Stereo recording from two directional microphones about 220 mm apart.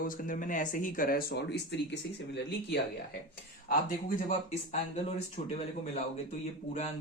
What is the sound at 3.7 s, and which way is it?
Speech, 35° left (ahead or behind).